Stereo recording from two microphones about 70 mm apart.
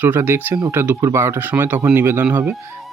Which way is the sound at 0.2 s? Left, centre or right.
Right.